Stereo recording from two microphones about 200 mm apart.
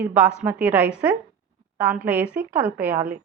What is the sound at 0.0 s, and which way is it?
A woman's voice, 5° right (ahead or behind).